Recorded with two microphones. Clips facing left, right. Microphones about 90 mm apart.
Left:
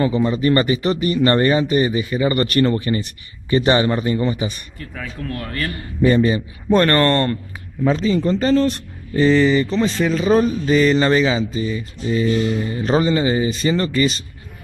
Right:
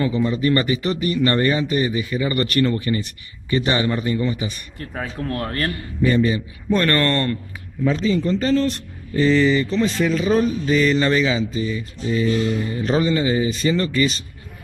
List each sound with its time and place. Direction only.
0.0 s speech: 30° left (ahead or behind)
2.6 s speech: 30° left (ahead or behind)
4.7 s speech: 30° right (ahead or behind)
6.0 s speech: 35° left (ahead or behind)
12.3 s speech: 10° left (ahead or behind)
12.7 s speech: 35° left (ahead or behind)